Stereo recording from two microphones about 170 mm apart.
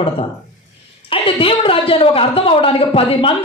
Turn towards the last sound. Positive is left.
turn(degrees=30)  # may be behind; listen again after turning